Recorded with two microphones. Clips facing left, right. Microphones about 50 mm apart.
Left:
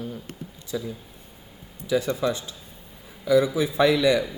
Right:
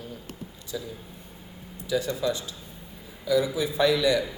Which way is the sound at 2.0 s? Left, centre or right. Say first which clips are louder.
Left 2 dB; left.